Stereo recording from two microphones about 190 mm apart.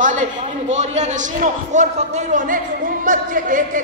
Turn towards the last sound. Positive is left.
turn(degrees=-45)  # may be behind; listen again after turning